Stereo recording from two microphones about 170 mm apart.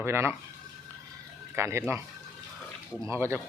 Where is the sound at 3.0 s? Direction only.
15° right (ahead or behind).